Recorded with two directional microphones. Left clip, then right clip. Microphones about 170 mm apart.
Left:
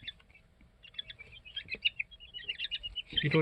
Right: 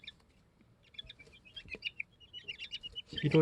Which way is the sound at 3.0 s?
50° right (ahead or behind).